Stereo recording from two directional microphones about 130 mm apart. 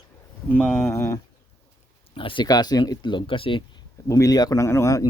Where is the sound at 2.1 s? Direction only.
40° left (ahead or behind).